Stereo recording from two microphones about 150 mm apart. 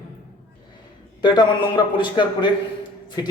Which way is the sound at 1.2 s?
30° left (ahead or behind).